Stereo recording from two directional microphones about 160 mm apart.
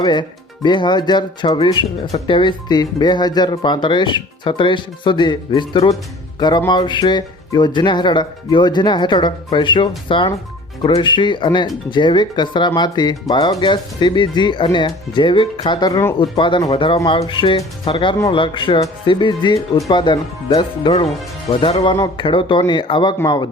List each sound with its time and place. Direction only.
0.0 s speech: 25° left (ahead or behind)
16.1 s speech: 30° left (ahead or behind)